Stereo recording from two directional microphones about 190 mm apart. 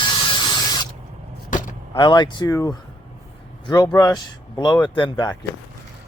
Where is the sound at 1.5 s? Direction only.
45° left (ahead or behind).